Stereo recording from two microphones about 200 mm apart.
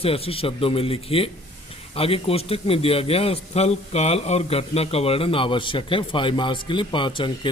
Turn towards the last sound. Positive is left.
turn(degrees=25)  # may be behind; listen again after turning